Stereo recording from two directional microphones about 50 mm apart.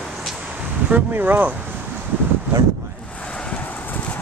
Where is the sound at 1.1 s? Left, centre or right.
Right.